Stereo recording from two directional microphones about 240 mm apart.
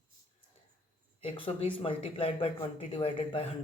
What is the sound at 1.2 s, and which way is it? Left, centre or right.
Speech, left.